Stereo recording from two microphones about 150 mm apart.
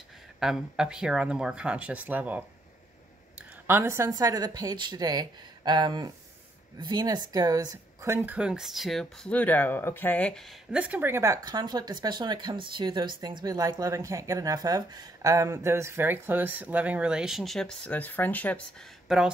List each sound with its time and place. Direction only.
0.4 s speech: 5° right (ahead or behind)
10.7 s speech: 10° right (ahead or behind); by 18.6 s 10° left (ahead or behind)
19.0 s speech: 5° right (ahead or behind)